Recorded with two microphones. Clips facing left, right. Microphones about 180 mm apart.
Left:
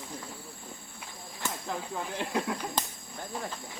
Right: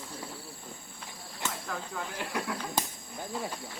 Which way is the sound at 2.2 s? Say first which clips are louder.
Left 4 dB; 20° left (ahead or behind).